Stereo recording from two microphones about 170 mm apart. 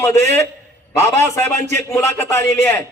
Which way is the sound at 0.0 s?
15° left (ahead or behind).